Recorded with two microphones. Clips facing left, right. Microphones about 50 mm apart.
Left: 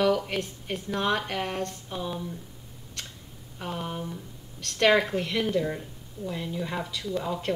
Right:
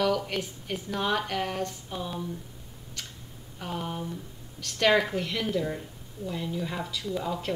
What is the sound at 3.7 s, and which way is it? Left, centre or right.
Speech, centre.